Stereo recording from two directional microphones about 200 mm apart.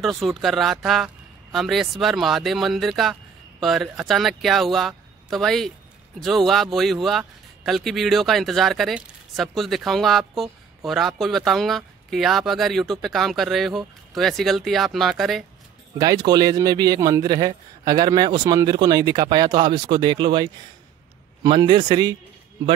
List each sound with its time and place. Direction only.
0.0 s speech: centre (ahead or behind)
16.0 s a man's voice: 20° right (ahead or behind)